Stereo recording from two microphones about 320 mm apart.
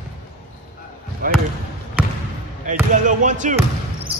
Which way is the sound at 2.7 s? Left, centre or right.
Right.